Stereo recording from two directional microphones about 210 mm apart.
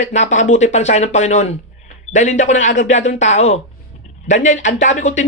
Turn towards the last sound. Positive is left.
turn(degrees=35)  # may be behind; listen again after turning